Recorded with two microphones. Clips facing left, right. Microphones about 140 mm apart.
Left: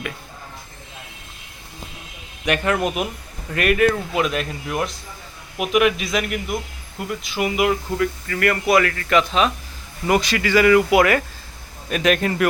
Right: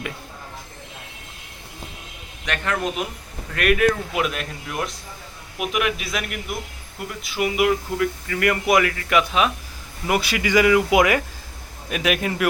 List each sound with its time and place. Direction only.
2.5 s speech: 10° left (ahead or behind)
8.4 s speech: 15° right (ahead or behind)